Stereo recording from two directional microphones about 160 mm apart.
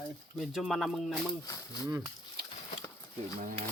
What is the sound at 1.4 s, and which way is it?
Speech, 20° left (ahead or behind).